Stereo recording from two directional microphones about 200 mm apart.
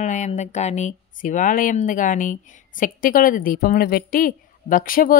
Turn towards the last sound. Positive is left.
turn(degrees=45)  # may be behind; listen again after turning